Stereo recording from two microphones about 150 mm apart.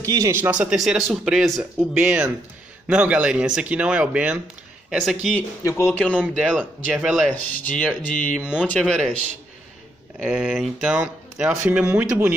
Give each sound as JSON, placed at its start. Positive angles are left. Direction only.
{"t": 0.0, "sound": "speech", "side_deg": -20}
{"t": 5.6, "sound": "speech", "side_deg": 20}
{"t": 6.1, "sound": "speech", "side_deg": -10}
{"t": 7.2, "sound": "speech", "side_deg": 10}
{"t": 8.4, "sound": "speech", "side_deg": -5}
{"t": 8.6, "sound": "speech", "side_deg": 5}
{"t": 10.2, "sound": "speech", "side_deg": -5}
{"t": 11.6, "sound": "speech", "side_deg": -15}